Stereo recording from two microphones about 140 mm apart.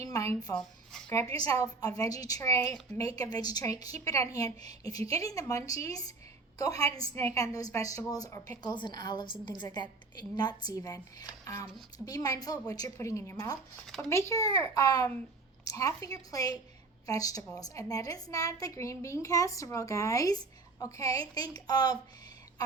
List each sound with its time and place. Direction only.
0.0 s speech: 25° left (ahead or behind)
1.4 s a woman's voice: 25° left (ahead or behind)